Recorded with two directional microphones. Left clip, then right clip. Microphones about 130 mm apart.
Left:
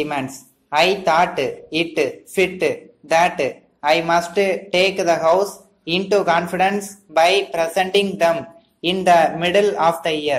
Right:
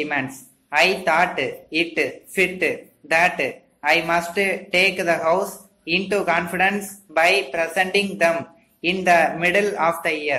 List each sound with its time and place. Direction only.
0.0 s speech: 20° left (ahead or behind)